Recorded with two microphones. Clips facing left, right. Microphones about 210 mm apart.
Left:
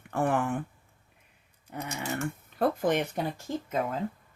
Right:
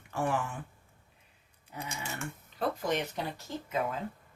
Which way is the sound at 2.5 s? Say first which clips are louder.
Left 5 dB; 55° left (ahead or behind).